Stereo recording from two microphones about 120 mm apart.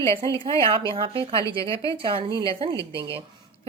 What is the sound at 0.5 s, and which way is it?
A woman's voice, 45° right (ahead or behind).